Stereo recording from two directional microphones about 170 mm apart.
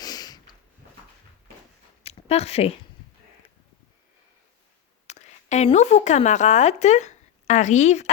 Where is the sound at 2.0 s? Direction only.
35° left (ahead or behind).